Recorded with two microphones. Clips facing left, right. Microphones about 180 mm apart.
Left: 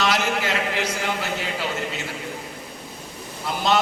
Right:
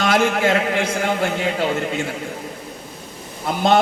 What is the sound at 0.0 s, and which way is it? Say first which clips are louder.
A man's voice: right 6 dB; 50° right (ahead or behind).